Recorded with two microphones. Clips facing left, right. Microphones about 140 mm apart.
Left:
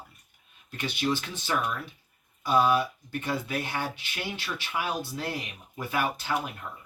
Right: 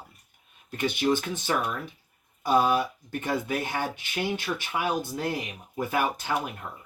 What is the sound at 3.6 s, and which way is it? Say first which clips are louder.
Speech: right 2 dB; 15° right (ahead or behind).